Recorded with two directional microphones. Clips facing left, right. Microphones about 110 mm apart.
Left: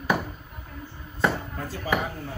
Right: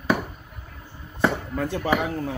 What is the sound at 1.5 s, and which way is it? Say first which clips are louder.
Speech: right 5 dB; 75° right (ahead or behind).